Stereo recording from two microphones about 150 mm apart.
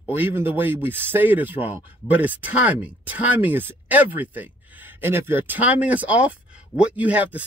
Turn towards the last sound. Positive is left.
turn(degrees=-10)  # may be behind; listen again after turning